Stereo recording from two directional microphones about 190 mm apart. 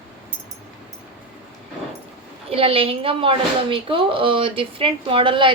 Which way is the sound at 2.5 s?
30° right (ahead or behind).